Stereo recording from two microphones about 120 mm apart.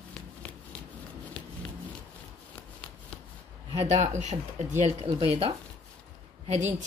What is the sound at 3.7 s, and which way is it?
Speech, 65° right (ahead or behind).